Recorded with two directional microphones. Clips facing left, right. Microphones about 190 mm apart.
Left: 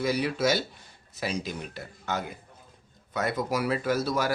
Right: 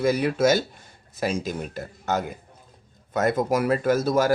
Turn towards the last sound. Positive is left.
turn(degrees=-45)  # may be behind; listen again after turning